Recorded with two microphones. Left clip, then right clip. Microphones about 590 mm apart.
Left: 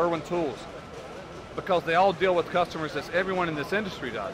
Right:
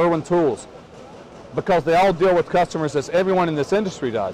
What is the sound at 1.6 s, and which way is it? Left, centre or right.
Speech, right.